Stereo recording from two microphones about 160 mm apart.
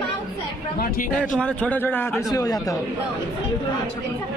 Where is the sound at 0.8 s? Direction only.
60° left (ahead or behind).